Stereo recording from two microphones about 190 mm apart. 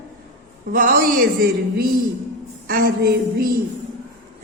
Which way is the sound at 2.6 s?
50° right (ahead or behind).